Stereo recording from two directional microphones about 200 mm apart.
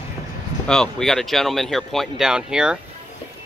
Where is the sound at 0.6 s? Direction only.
5° left (ahead or behind).